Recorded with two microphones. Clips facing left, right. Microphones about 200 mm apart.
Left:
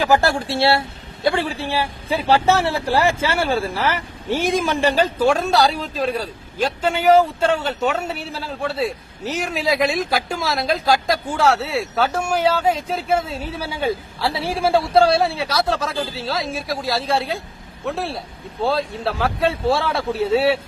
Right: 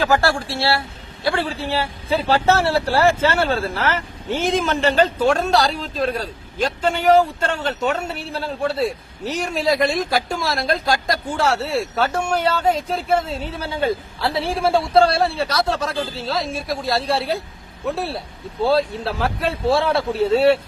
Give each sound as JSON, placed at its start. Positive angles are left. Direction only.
{"t": 0.0, "sound": "a man's voice", "side_deg": 20}